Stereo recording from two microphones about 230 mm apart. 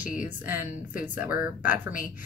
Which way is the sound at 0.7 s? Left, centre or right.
Left.